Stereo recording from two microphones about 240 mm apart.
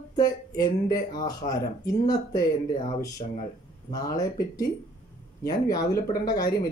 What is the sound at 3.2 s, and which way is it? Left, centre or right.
Speech, left.